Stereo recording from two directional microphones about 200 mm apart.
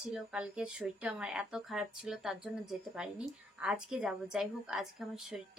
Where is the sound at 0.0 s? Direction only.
5° right (ahead or behind).